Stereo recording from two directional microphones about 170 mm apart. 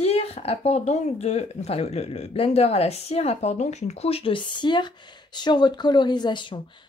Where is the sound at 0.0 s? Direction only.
35° left (ahead or behind).